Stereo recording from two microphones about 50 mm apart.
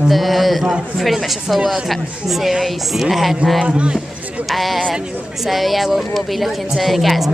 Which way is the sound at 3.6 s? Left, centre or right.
Right.